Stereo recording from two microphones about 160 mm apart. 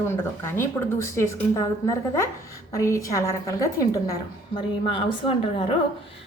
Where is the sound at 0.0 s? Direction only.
15° left (ahead or behind).